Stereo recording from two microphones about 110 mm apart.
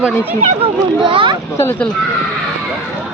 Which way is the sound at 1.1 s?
50° right (ahead or behind).